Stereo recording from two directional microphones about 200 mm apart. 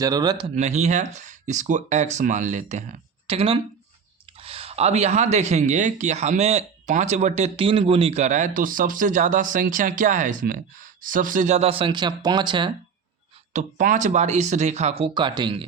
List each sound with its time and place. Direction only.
0.0 s speech: 20° right (ahead or behind)
0.5 s speech: 35° right (ahead or behind)
13.5 s speech: 35° right (ahead or behind)